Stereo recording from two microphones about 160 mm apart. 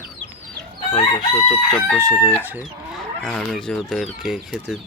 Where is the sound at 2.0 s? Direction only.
20° right (ahead or behind).